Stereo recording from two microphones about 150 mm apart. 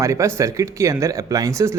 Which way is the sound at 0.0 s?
20° right (ahead or behind).